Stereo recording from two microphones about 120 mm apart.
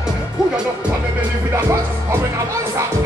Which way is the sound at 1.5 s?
25° right (ahead or behind).